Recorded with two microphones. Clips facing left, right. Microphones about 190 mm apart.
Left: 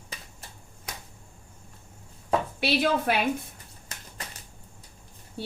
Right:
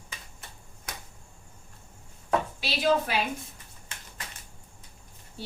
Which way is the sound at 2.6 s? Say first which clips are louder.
Left 1 dB; 60° left (ahead or behind).